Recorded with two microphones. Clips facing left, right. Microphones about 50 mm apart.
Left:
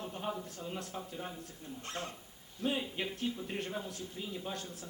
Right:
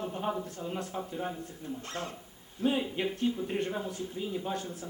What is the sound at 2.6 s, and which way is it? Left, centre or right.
Speech, centre.